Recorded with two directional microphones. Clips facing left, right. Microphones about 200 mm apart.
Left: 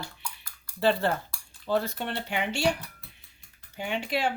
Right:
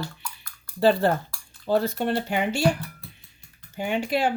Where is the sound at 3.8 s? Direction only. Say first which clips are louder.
Right 5 dB; 45° right (ahead or behind).